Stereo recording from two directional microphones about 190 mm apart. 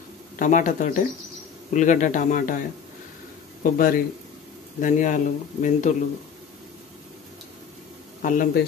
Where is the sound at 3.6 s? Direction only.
45° left (ahead or behind).